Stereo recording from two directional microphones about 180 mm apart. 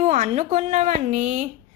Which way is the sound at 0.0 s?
40° right (ahead or behind).